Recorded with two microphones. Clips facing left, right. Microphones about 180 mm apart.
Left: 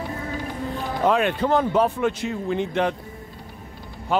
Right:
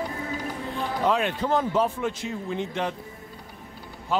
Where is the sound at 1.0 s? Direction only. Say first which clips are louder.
Left 5 dB; 60° left (ahead or behind).